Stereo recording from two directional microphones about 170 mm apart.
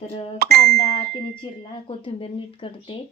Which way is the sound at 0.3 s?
70° right (ahead or behind).